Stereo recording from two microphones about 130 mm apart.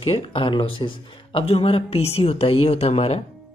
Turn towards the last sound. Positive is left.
turn(degrees=55)  # may be behind; listen again after turning